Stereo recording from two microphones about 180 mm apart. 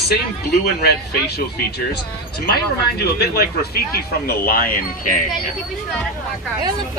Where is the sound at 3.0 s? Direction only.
65° left (ahead or behind).